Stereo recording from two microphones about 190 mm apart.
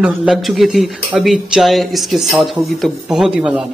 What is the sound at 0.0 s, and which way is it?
Speech, 5° right (ahead or behind).